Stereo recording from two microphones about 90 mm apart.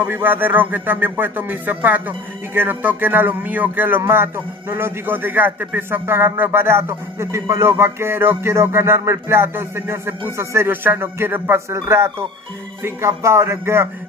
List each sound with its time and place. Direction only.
0.0 s a man's voice: 20° right (ahead or behind)